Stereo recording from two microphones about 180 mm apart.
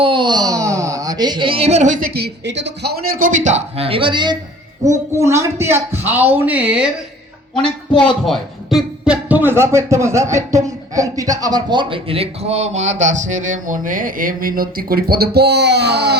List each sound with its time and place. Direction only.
0.0 s a sound: 25° right (ahead or behind); by 2.0 s 45° right (ahead or behind)
2.1 s speech: 70° right (ahead or behind); by 6.8 s 5° right (ahead or behind)
8.2 s speech: centre (ahead or behind); by 16.1 s 65° right (ahead or behind)